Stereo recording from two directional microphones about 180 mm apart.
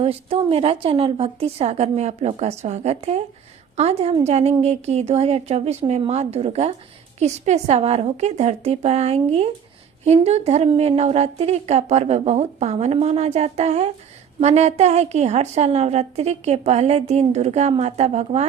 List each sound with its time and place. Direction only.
0.0 s a woman's voice: 30° right (ahead or behind)